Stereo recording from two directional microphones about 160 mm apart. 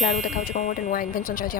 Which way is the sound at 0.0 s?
55° left (ahead or behind).